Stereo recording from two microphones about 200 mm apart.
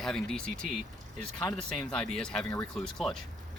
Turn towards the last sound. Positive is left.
turn(degrees=0)  # may be behind; listen again after turning